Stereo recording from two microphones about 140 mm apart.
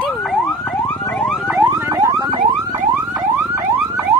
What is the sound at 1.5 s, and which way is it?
Car alarm, 20° right (ahead or behind).